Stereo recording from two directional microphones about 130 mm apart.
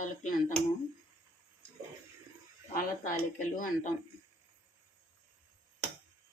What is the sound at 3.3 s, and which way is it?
Speech, 90° left.